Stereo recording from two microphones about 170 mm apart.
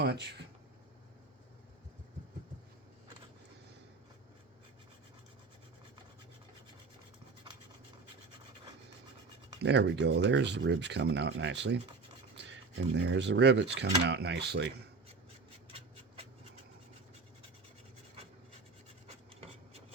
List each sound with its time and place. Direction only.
0.0 s speech: 75° right (ahead or behind)
9.6 s speech: 85° right